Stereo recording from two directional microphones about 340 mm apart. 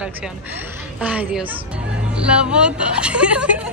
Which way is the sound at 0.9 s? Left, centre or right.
Centre.